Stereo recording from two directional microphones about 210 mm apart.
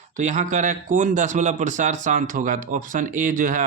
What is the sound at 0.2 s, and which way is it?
Speech, 35° right (ahead or behind).